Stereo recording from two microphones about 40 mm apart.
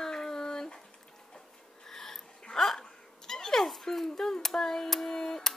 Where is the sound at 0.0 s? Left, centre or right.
Centre.